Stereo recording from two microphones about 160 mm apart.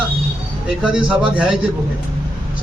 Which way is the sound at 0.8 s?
5° right (ahead or behind).